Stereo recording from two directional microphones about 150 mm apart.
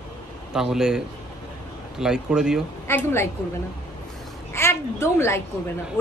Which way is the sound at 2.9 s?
15° left (ahead or behind).